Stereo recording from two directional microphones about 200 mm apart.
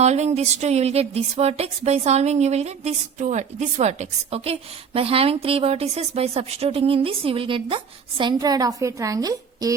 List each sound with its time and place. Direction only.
0.0 s a woman's voice: 35° right (ahead or behind); by 9.7 s 15° right (ahead or behind)